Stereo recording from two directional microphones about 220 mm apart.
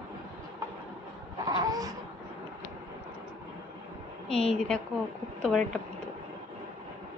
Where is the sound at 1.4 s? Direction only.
20° right (ahead or behind).